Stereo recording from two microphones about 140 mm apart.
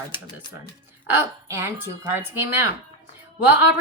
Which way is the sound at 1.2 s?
20° right (ahead or behind).